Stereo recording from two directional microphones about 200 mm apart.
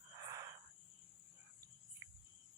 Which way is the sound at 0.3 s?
15° right (ahead or behind).